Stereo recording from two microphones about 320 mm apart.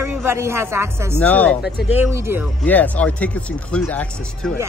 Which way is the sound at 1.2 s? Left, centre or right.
Centre.